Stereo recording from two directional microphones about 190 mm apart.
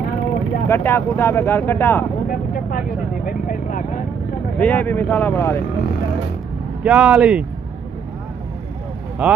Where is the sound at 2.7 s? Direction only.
50° left (ahead or behind).